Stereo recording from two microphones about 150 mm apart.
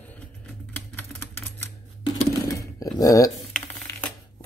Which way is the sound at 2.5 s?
25° left (ahead or behind).